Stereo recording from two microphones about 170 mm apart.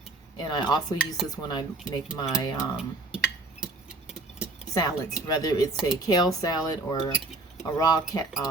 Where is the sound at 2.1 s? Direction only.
25° left (ahead or behind).